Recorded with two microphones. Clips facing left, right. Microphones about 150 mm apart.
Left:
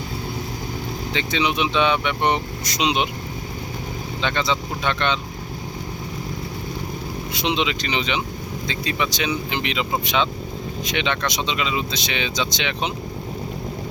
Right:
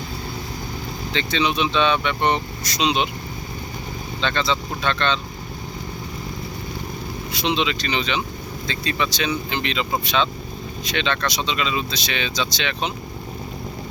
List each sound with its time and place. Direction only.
1.1 s speech: 15° left (ahead or behind)
4.2 s speech: 15° left (ahead or behind)
7.3 s speech: 20° left (ahead or behind)
10.8 s speech: 15° left (ahead or behind)